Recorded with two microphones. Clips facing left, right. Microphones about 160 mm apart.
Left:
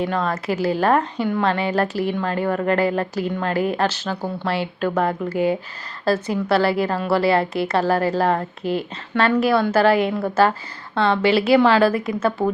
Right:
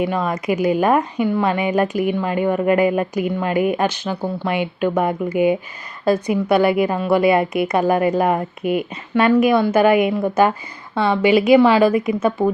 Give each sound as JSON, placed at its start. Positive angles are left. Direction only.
{"t": 0.0, "sound": "a woman's voice", "side_deg": -10}